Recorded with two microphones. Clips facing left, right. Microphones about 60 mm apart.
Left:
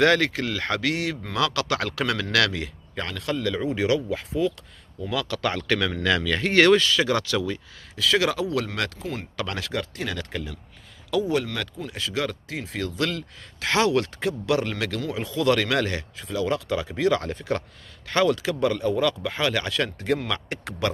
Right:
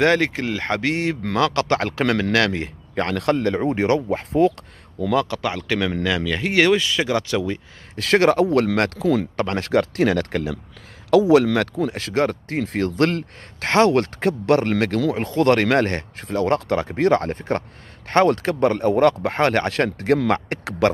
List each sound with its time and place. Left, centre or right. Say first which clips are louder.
0.0 s a man's voice: right 2 dB; right
4.3 s speech: right 8 dB; right
5.1 s a man's voice: right 7 dB; right
5.4 s speech: right 2 dB; centre
7.9 s speech: right 6 dB; right
8.6 s speech: right 10 dB; right
11.1 s speech: right 10 dB; right